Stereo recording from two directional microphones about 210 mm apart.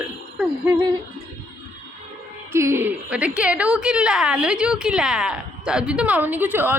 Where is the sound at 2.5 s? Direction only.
10° right (ahead or behind).